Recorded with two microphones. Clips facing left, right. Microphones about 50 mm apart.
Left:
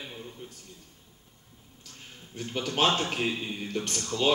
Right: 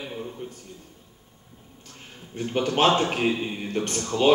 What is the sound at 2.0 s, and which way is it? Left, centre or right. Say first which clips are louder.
A man's voice: right 6 dB; right.